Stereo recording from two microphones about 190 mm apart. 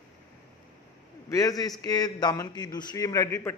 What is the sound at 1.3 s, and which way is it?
A man's voice, 20° left (ahead or behind).